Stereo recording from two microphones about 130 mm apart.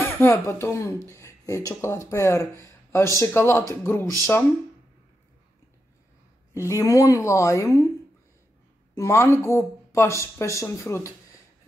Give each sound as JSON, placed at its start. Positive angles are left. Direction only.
{"t": 0.0, "sound": "speech", "side_deg": 20}
{"t": 1.0, "sound": "a sound", "side_deg": 20}
{"t": 1.8, "sound": "speech", "side_deg": 20}
{"t": 6.7, "sound": "speech", "side_deg": 25}
{"t": 8.9, "sound": "speech", "side_deg": 20}